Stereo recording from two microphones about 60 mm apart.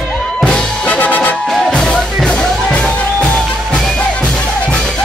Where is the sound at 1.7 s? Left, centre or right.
Centre.